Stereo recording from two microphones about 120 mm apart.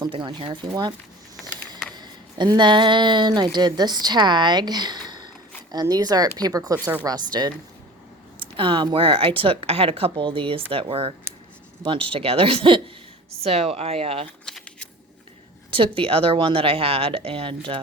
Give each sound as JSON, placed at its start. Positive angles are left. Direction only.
{"t": 0.1, "sound": "speech", "side_deg": -40}
{"t": 2.0, "sound": "speech", "side_deg": -35}
{"t": 8.4, "sound": "speech", "side_deg": -45}
{"t": 14.4, "sound": "a sound", "side_deg": 5}
{"t": 15.7, "sound": "speech", "side_deg": -45}